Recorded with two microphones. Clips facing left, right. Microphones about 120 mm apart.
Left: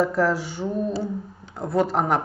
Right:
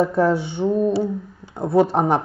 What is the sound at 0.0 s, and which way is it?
Speech, 25° right (ahead or behind).